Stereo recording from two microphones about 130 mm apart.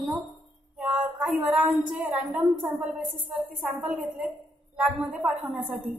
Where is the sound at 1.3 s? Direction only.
5° right (ahead or behind).